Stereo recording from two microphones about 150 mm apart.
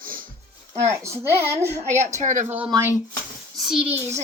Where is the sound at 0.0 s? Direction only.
70° right (ahead or behind).